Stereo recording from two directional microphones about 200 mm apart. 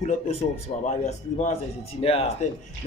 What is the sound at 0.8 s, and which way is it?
Speech, 35° left (ahead or behind).